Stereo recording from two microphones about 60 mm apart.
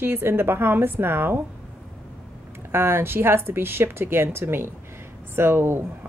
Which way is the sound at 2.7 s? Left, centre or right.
Right.